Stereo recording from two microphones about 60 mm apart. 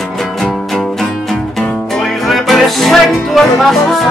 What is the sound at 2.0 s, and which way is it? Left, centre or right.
Music, centre.